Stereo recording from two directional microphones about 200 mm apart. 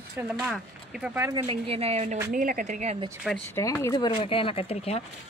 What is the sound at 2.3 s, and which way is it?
Speech, 40° right (ahead or behind).